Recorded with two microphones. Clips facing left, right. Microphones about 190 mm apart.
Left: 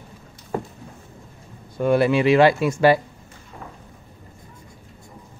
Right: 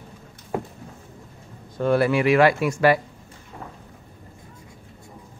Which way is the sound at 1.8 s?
15° left (ahead or behind).